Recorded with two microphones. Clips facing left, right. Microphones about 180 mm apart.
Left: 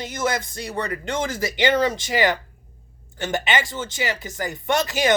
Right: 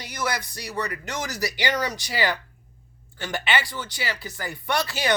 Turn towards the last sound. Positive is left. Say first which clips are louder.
# left 5 dB
turn(degrees=20)  # may be behind; listen again after turning